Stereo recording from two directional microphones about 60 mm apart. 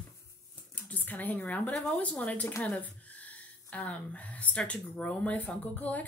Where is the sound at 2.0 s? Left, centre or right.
Left.